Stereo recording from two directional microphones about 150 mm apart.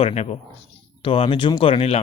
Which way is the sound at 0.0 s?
45° left (ahead or behind).